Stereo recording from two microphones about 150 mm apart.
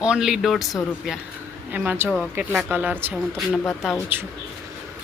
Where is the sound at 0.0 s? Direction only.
5° right (ahead or behind).